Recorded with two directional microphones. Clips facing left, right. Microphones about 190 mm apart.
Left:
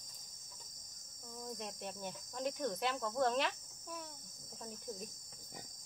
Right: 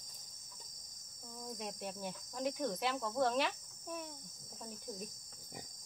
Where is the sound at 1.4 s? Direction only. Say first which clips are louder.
Right 1 dB; 5° right (ahead or behind).